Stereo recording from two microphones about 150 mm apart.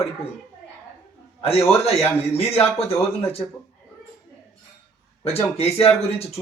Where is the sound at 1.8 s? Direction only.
40° left (ahead or behind).